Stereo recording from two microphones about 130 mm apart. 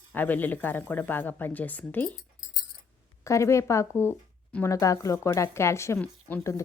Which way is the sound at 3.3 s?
25° left (ahead or behind).